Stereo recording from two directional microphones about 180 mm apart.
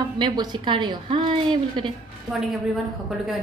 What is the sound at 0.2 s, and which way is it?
A woman's voice, 25° right (ahead or behind).